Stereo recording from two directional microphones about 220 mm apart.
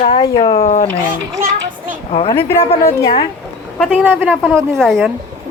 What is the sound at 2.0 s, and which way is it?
Speech, 25° left (ahead or behind).